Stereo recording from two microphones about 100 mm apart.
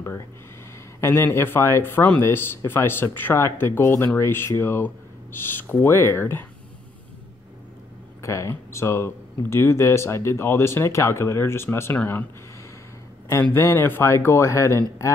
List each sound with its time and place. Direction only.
1.0 s speech: 25° left (ahead or behind)
8.2 s speech: 30° left (ahead or behind)
13.3 s speech: 25° left (ahead or behind)